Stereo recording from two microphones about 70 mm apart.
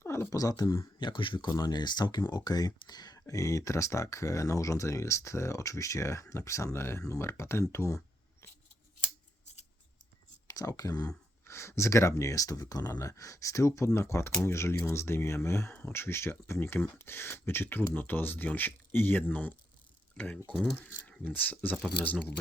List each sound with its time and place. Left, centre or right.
0.0 s a sound: left
0.3 s speech: left
0.9 s speech: left
1.5 s speech: left
2.3 s speech: left
3.2 s speech: left
10.4 s speech: left
11.4 s speech: left